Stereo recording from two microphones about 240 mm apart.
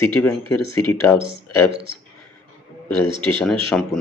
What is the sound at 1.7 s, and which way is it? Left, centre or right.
Speech, right.